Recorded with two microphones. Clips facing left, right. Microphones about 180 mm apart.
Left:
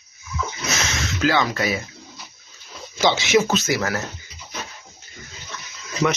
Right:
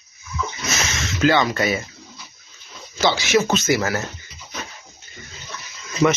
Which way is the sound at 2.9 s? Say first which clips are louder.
Left 1 dB; 20° left (ahead or behind).